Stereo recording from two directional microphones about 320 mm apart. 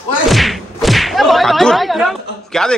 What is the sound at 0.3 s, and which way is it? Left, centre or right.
Speech, centre.